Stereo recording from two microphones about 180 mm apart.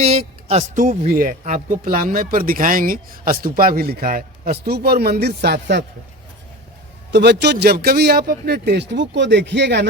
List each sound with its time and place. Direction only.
0.0 s speech: 35° right (ahead or behind); by 5.8 s 65° right (ahead or behind)
7.1 s speech: 70° right (ahead or behind)